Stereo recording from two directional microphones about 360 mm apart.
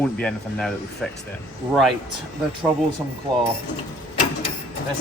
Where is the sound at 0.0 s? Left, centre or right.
Centre.